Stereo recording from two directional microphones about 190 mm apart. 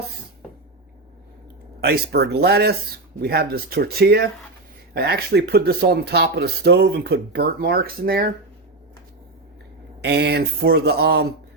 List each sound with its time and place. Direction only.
1.8 s speech: 60° right (ahead or behind)
10.0 s speech: 60° right (ahead or behind)